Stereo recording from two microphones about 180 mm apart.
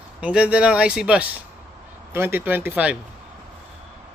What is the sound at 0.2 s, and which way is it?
Speech, 5° right (ahead or behind).